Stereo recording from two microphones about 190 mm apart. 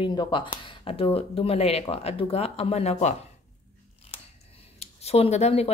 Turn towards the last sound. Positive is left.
turn(degrees=35)  # may be behind; listen again after turning